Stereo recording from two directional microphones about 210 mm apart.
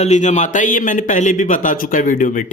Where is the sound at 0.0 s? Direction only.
35° left (ahead or behind).